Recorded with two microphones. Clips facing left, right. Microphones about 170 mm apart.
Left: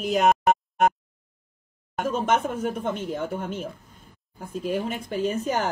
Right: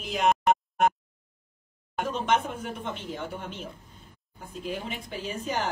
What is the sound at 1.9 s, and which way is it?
Speech, 45° left (ahead or behind).